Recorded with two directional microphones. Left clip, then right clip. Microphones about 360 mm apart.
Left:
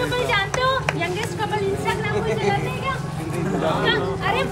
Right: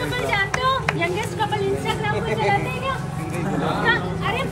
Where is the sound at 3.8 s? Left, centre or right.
Centre.